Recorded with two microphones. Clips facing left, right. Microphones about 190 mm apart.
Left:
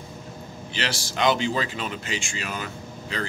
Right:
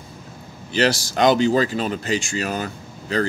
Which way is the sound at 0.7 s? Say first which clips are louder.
Right 9 dB; 40° right (ahead or behind).